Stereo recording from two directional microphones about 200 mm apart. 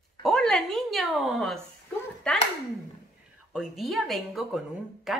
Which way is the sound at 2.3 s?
5° left (ahead or behind).